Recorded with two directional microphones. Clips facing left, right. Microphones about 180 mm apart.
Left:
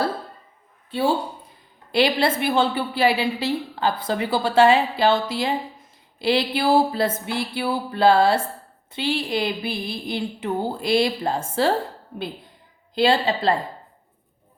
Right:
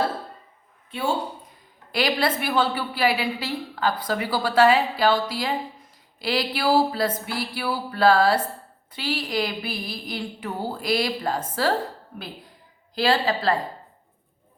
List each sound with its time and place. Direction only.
0.9 s a woman's voice: 35° left (ahead or behind)
12.9 s a woman's voice: 25° left (ahead or behind)